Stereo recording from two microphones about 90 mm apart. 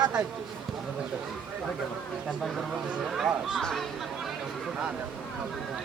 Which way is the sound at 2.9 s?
5° right (ahead or behind).